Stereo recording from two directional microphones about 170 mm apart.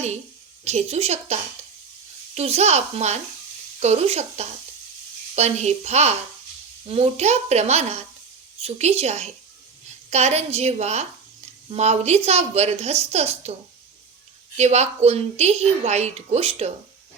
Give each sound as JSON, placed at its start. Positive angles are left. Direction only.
{"t": 0.6, "sound": "a woman's voice", "side_deg": -40}
{"t": 14.5, "sound": "a woman's voice", "side_deg": -40}